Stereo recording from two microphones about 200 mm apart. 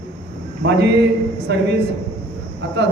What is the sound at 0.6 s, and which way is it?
A man's voice, 55° right (ahead or behind).